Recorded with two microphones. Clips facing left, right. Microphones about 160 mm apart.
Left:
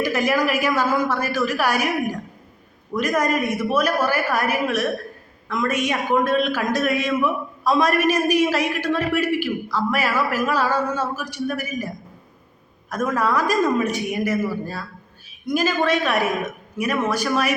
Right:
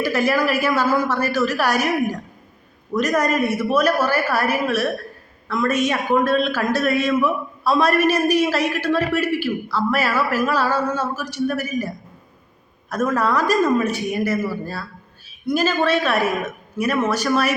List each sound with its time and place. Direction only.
0.0 s a man's voice: 15° left (ahead or behind)
12.9 s a man's voice: 15° left (ahead or behind)